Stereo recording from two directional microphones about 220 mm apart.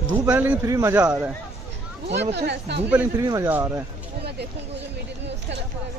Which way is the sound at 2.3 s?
50° right (ahead or behind).